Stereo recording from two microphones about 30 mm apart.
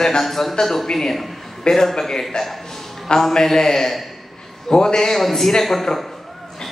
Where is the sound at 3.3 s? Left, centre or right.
Centre.